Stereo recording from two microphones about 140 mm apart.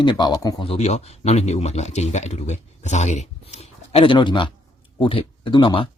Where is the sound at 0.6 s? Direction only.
45° left (ahead or behind).